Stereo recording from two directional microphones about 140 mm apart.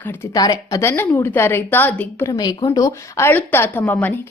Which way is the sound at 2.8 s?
20° left (ahead or behind).